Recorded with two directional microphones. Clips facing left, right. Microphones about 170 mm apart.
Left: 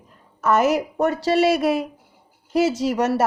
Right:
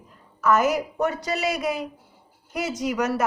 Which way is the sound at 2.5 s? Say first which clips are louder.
Left 6 dB; 30° left (ahead or behind).